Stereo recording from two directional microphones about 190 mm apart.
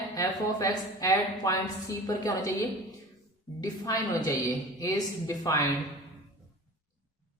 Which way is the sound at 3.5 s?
20° left (ahead or behind).